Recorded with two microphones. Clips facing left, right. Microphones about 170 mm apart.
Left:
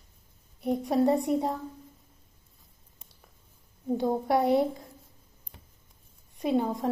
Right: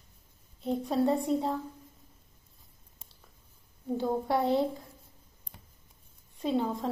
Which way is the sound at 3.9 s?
15° left (ahead or behind).